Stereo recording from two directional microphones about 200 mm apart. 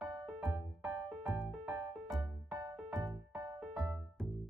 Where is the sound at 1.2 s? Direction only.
10° right (ahead or behind).